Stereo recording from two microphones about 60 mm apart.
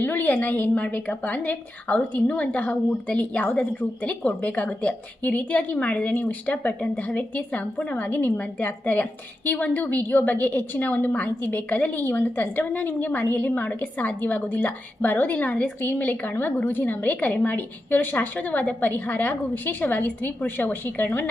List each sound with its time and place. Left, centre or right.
0.0 s a woman's voice: left